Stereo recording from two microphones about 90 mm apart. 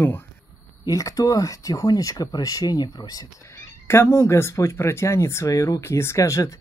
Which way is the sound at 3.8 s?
30° left (ahead or behind).